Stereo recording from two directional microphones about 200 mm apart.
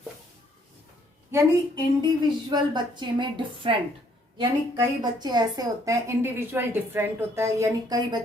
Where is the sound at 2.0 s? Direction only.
20° right (ahead or behind).